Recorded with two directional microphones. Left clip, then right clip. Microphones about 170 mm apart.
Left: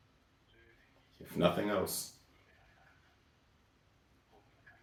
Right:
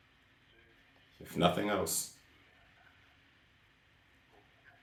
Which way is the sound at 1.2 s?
20° right (ahead or behind).